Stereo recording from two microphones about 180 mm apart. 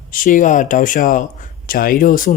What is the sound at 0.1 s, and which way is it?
Speech, 45° left (ahead or behind).